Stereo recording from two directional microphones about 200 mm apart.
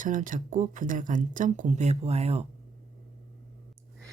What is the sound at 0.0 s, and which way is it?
Speech, 40° right (ahead or behind).